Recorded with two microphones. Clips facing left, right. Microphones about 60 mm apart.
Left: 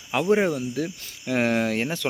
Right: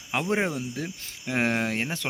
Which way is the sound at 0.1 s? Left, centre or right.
Centre.